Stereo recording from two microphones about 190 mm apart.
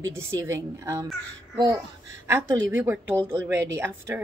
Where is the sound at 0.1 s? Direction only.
15° right (ahead or behind).